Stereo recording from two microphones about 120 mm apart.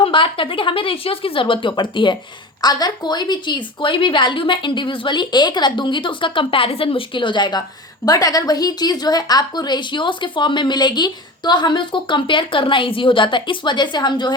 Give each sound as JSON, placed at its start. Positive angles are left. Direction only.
{"t": 0.0, "sound": "a woman's voice", "side_deg": 45}